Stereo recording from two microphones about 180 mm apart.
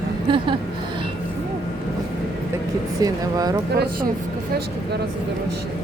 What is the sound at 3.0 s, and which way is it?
Speech, 20° right (ahead or behind).